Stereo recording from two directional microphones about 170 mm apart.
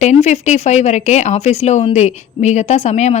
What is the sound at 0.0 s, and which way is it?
A woman's voice, 45° left (ahead or behind).